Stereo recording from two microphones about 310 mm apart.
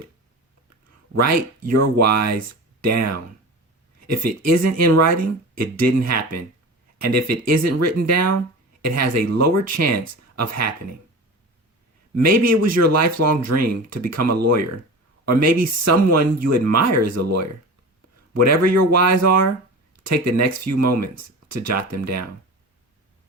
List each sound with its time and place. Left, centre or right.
1.1 s speech: right
12.1 s speech: right